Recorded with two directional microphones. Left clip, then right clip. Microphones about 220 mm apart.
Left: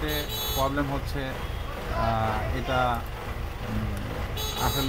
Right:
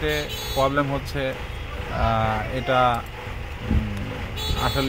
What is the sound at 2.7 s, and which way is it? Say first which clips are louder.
Speech: right 6 dB; 40° right (ahead or behind).